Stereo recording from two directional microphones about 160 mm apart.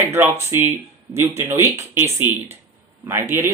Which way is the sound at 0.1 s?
15° right (ahead or behind).